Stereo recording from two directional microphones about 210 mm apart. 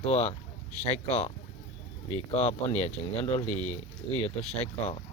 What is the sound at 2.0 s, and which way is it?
Speech, 30° left (ahead or behind).